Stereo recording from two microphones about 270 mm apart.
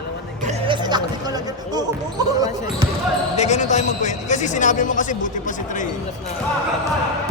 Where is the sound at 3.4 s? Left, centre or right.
Left.